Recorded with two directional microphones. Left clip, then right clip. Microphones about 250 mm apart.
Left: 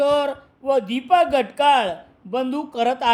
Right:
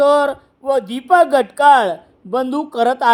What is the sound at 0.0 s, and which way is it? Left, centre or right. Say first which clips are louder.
A man's voice: right 6 dB; centre.